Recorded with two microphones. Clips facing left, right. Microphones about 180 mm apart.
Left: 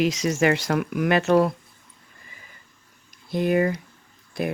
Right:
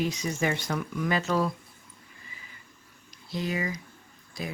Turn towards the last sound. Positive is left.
turn(degrees=60)  # may be behind; listen again after turning